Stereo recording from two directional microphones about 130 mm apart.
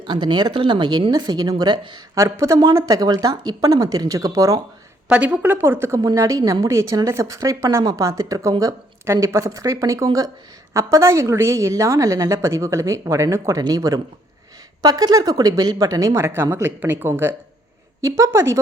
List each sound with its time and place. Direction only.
0.0 s speech: 35° right (ahead or behind)
2.1 s speech: 25° right (ahead or behind)
5.0 s a woman's voice: 10° right (ahead or behind)